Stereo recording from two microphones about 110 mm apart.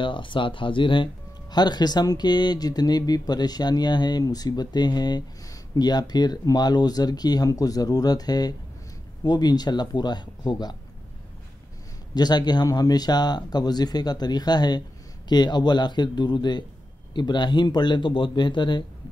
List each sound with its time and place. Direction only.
0.0 s speech: 50° left (ahead or behind)
12.1 s a man's voice: 40° left (ahead or behind)